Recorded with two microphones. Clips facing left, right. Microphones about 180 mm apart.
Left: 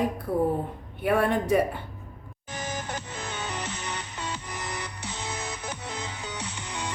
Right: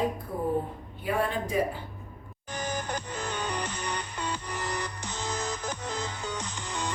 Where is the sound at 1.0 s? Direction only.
65° left (ahead or behind).